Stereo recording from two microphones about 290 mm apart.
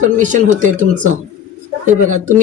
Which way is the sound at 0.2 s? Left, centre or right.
Right.